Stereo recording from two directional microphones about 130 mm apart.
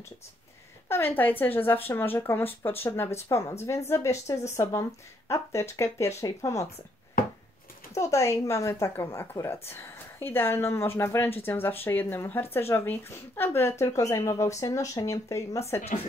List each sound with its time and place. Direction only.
0.8 s speech: 15° left (ahead or behind)
7.9 s speech: 25° left (ahead or behind)